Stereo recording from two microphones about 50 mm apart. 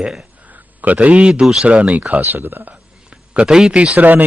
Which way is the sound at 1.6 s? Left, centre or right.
Right.